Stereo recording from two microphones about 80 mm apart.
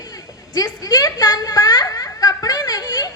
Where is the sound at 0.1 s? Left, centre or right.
Left.